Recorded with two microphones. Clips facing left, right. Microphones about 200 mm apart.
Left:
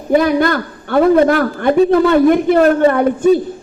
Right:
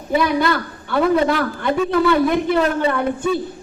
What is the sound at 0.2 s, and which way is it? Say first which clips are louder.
A woman's voice: left 5 dB; 50° left (ahead or behind).